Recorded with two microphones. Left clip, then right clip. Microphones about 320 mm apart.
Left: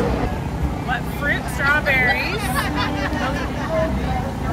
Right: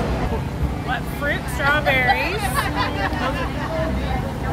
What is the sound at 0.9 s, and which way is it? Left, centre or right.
Vehicle, centre.